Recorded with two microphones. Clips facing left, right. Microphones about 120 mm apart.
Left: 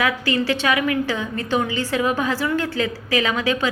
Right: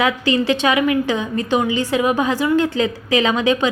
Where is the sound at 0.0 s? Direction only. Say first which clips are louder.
Right 4 dB; 20° right (ahead or behind).